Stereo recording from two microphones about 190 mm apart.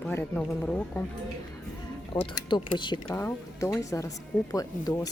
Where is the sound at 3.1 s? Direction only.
10° left (ahead or behind).